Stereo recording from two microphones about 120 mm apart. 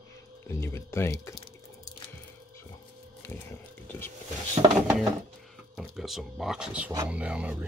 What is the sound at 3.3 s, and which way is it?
Speech, 15° left (ahead or behind).